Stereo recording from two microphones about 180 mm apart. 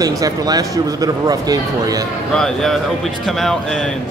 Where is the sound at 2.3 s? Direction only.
5° left (ahead or behind).